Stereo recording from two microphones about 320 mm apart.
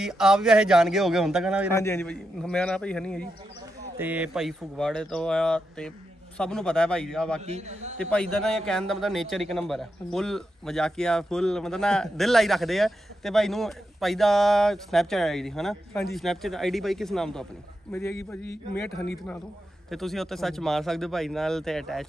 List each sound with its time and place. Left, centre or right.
0.0 s a man's voice: centre
1.7 s a man's voice: centre
7.4 s a man's voice: centre
8.0 s a man's voice: centre
19.9 s a man's voice: centre